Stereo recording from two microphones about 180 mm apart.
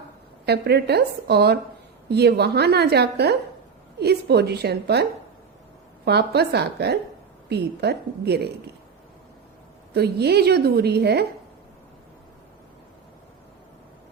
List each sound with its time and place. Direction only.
0.4 s a woman's voice: 65° right (ahead or behind)
6.1 s a woman's voice: 65° right (ahead or behind)
9.9 s a woman's voice: 65° right (ahead or behind)